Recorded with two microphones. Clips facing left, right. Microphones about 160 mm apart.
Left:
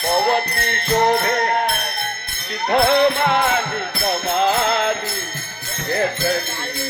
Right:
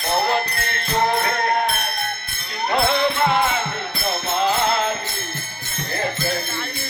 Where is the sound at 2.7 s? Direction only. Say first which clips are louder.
Left 5 dB; 65° left (ahead or behind).